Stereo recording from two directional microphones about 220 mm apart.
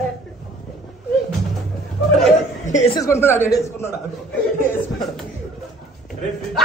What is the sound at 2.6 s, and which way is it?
Speech, 30° left (ahead or behind).